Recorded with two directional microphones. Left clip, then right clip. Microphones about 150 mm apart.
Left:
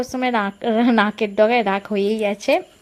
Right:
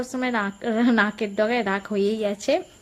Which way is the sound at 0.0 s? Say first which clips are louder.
Left 5 dB; 20° left (ahead or behind).